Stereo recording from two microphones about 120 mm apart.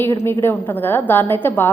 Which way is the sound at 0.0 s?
20° left (ahead or behind).